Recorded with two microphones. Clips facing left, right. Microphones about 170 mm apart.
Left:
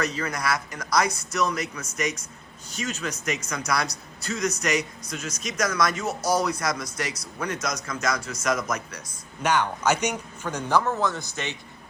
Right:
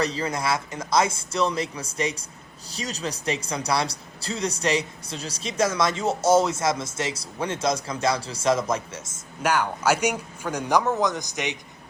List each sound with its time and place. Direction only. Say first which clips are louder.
0.0 s speech: right 2 dB; 30° right (ahead or behind)
9.4 s a man's voice: even; 10° right (ahead or behind)